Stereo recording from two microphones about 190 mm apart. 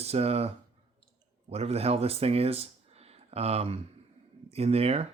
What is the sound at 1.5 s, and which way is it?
Speech, 35° right (ahead or behind).